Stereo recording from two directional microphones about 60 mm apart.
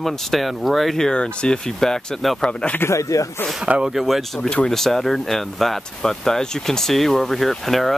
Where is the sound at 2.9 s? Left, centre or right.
Left.